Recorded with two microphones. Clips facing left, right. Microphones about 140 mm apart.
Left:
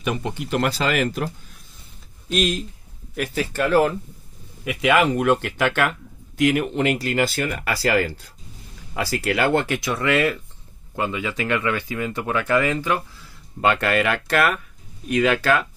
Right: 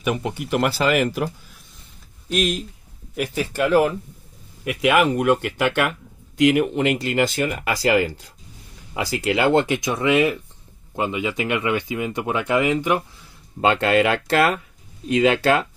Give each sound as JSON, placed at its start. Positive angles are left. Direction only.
{"t": 0.0, "sound": "speech", "side_deg": -10}
{"t": 2.3, "sound": "speech", "side_deg": 0}
{"t": 3.2, "sound": "speech", "side_deg": -15}
{"t": 5.7, "sound": "speech", "side_deg": -15}